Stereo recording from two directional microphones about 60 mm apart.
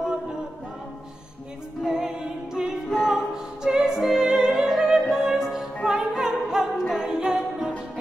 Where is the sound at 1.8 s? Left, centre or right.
Centre.